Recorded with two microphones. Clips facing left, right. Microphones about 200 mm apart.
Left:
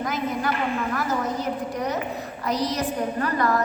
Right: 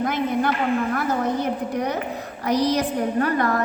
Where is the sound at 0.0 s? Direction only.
55° right (ahead or behind).